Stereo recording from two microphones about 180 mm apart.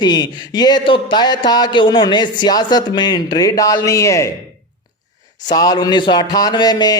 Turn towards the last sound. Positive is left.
turn(degrees=20)  # may be behind; listen again after turning